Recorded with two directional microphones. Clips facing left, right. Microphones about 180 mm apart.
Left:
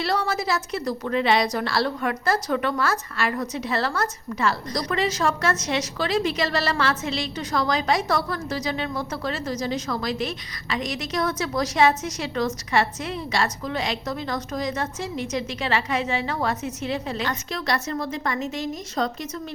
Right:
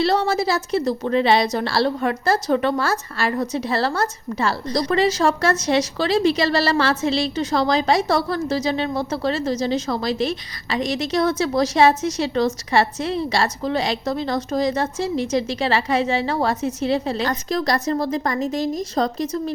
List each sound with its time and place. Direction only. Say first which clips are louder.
0.0 s a woman's voice: right 6 dB; 25° right (ahead or behind)